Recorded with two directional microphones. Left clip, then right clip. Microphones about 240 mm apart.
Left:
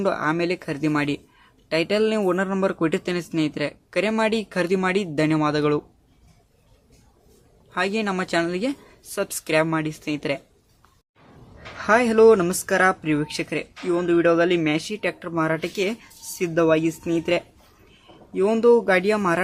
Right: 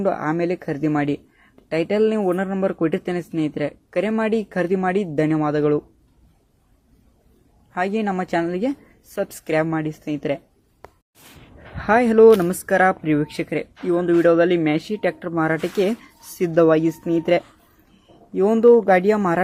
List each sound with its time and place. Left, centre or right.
0.0 s speech: centre
7.7 s speech: centre
11.8 s speech: centre